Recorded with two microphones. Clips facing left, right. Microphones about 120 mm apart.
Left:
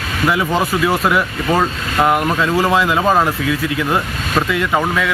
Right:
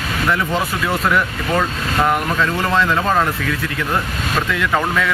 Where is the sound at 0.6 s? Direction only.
5° left (ahead or behind).